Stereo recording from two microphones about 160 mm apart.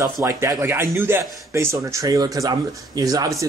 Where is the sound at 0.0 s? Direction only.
15° right (ahead or behind).